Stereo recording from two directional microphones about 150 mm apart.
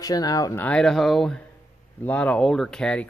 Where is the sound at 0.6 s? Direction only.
5° left (ahead or behind).